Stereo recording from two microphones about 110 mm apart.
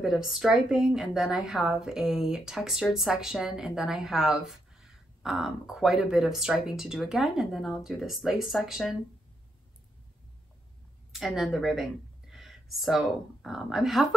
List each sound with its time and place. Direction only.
0.0 s a woman's voice: 5° right (ahead or behind)
11.1 s a woman's voice: centre (ahead or behind)